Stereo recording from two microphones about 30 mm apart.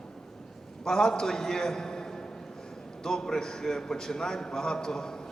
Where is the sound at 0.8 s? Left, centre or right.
Centre.